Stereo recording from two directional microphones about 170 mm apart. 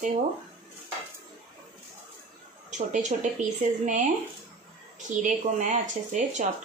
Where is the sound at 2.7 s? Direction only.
45° right (ahead or behind).